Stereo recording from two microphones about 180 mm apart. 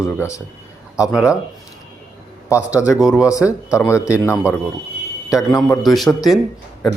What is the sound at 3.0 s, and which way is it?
Speech, 5° right (ahead or behind).